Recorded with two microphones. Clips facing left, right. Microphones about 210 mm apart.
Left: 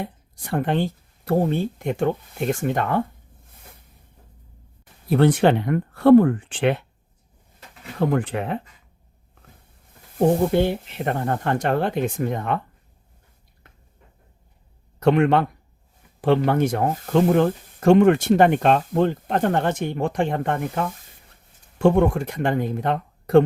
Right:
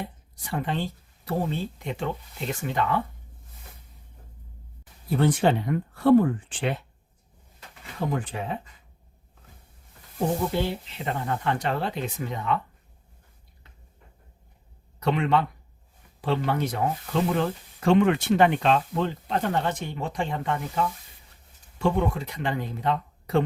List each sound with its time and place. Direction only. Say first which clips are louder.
0.0 s speech: left 5 dB; 55° left (ahead or behind)
5.0 s speech: left 5 dB; 65° left (ahead or behind)
7.9 s speech: left 7 dB; 60° left (ahead or behind)
10.2 s speech: left 8 dB; 55° left (ahead or behind)
14.9 s speech: left 6 dB; 50° left (ahead or behind)